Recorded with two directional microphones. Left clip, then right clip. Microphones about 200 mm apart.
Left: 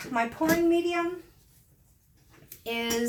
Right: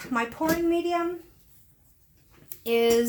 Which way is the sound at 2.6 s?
50° right (ahead or behind).